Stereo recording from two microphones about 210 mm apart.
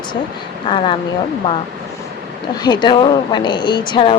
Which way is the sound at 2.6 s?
20° left (ahead or behind).